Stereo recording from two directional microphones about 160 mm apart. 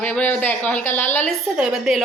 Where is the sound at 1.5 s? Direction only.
5° right (ahead or behind).